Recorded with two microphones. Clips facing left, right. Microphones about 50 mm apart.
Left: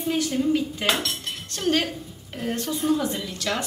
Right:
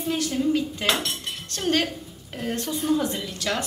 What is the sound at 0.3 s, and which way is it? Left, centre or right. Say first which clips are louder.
Speech: even; centre.